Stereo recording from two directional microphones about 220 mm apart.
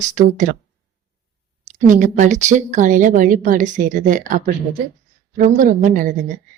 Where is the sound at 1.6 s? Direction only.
35° right (ahead or behind).